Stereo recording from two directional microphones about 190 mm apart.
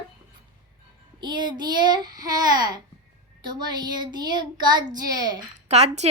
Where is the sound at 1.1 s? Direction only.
25° right (ahead or behind).